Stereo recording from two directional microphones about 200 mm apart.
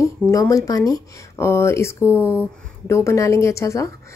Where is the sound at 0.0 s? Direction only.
15° left (ahead or behind).